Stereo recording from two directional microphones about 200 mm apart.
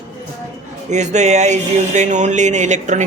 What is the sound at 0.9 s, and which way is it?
Speech, 35° right (ahead or behind).